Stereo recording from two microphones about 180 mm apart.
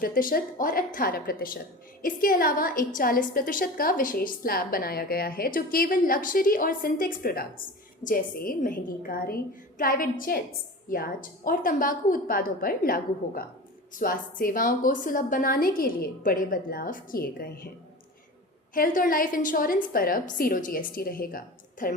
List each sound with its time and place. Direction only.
0.0 s a woman's voice: 50° left (ahead or behind)
18.7 s a woman's voice: 50° left (ahead or behind)